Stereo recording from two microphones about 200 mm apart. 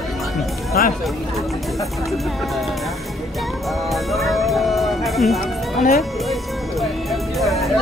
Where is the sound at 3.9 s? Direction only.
Centre (ahead or behind).